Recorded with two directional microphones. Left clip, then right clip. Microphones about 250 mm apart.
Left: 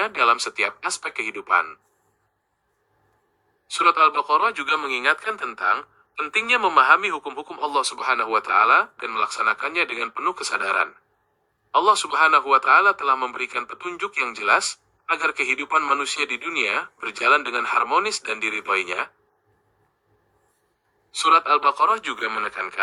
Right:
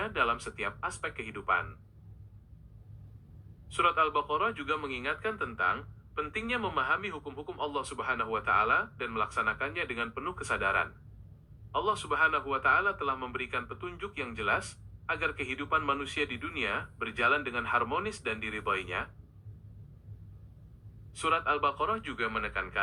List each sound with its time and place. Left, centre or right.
0.0 s a man's voice: left
3.7 s a man's voice: left
21.1 s a man's voice: left